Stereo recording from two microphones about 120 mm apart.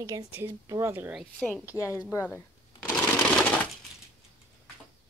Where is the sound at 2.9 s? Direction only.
10° left (ahead or behind).